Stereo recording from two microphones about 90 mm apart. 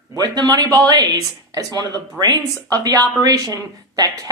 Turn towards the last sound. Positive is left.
turn(degrees=-40)  # may be behind; listen again after turning